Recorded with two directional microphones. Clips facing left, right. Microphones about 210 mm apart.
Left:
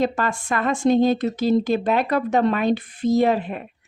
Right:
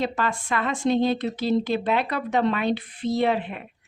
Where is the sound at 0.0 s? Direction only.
45° left (ahead or behind).